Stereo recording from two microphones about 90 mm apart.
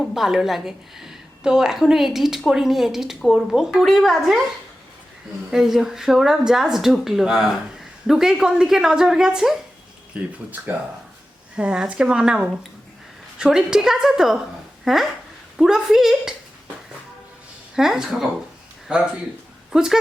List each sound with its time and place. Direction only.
0.0 s a woman's voice: centre (ahead or behind)
5.5 s a woman's voice: 5° right (ahead or behind)
10.2 s a woman's voice: 20° right (ahead or behind)
17.7 s a woman's voice: 5° right (ahead or behind)